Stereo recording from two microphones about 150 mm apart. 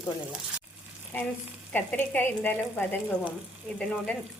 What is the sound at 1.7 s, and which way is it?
Speech, 10° left (ahead or behind).